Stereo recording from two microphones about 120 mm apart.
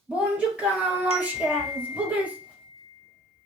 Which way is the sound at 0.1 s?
10° right (ahead or behind).